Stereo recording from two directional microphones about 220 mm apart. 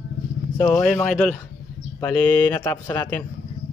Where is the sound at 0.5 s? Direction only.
15° left (ahead or behind).